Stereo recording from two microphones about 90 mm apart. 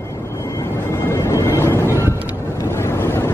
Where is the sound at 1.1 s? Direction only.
35° left (ahead or behind).